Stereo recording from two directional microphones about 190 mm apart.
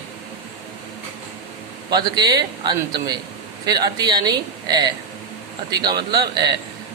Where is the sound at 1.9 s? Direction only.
20° right (ahead or behind).